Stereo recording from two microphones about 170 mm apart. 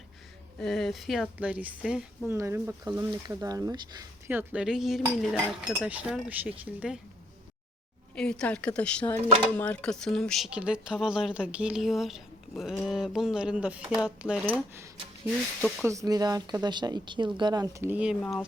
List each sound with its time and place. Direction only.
0.6 s speech: centre (ahead or behind); by 4.0 s 20° right (ahead or behind)
4.3 s speech: 10° right (ahead or behind)
8.1 s speech: 5° left (ahead or behind); by 14.8 s 10° right (ahead or behind)
15.9 s speech: 20° right (ahead or behind)
18.2 s speech: 5° left (ahead or behind)